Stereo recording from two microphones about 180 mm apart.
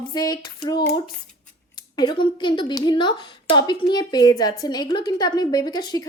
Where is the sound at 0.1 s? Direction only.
25° left (ahead or behind).